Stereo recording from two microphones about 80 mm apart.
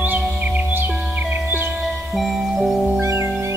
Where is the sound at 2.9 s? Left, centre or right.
Right.